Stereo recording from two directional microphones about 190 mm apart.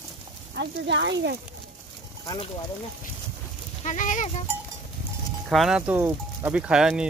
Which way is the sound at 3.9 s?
40° left (ahead or behind).